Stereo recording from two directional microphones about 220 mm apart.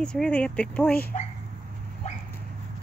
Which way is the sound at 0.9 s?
45° left (ahead or behind).